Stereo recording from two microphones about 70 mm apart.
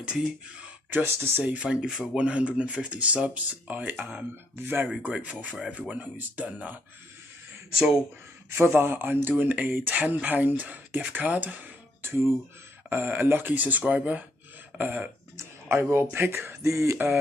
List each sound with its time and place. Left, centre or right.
0.8 s speech: right
1.4 s speech: centre
5.2 s speech: centre
7.7 s speech: centre
8.5 s speech: right
15.8 s speech: right